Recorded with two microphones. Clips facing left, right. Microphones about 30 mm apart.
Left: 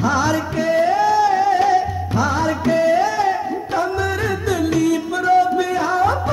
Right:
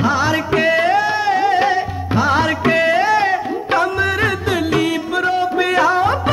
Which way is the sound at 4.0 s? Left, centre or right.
Right.